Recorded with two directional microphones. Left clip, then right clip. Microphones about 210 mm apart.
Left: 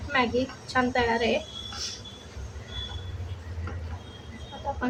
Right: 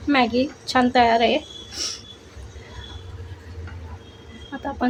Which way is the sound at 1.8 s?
35° right (ahead or behind).